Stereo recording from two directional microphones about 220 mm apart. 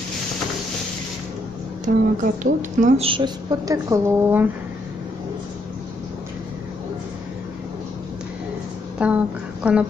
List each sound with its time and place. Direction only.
1.9 s a woman's voice: 40° right (ahead or behind)
3.1 s a woman's voice: 20° right (ahead or behind)
8.9 s a sound: 5° right (ahead or behind)